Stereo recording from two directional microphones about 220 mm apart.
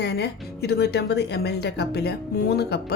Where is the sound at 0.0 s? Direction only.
50° left (ahead or behind).